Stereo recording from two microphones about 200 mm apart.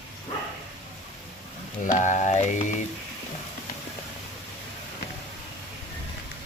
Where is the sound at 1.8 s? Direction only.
40° left (ahead or behind).